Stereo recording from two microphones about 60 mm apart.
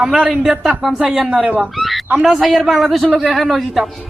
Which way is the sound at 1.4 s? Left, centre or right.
Right.